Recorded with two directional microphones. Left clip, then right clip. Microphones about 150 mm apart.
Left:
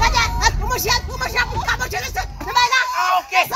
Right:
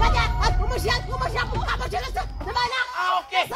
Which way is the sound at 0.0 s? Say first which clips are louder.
Left 6 dB; 5° left (ahead or behind).